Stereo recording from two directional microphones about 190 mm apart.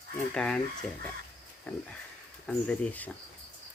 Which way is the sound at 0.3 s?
5° left (ahead or behind).